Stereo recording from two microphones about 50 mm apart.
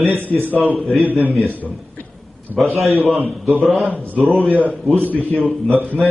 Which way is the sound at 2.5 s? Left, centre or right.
Centre.